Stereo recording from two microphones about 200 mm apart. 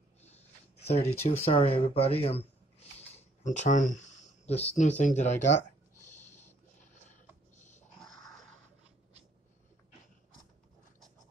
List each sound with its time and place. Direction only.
1.0 s speech: 10° left (ahead or behind)
1.4 s speech: 30° left (ahead or behind)
8.0 s a sound: centre (ahead or behind)